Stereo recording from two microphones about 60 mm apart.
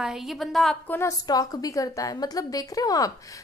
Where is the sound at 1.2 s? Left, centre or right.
Left.